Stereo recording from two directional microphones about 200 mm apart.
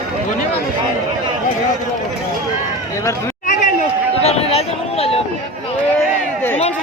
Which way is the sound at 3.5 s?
40° left (ahead or behind).